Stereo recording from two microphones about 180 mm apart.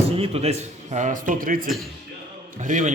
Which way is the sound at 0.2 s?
35° right (ahead or behind).